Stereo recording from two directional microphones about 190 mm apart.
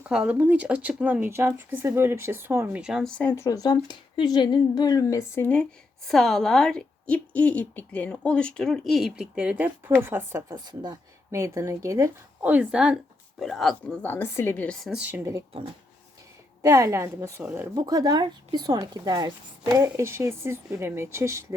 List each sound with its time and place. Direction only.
0.1 s a woman's voice: 5° right (ahead or behind)
14.9 s speech: 10° right (ahead or behind)
16.6 s a woman's voice: 15° right (ahead or behind)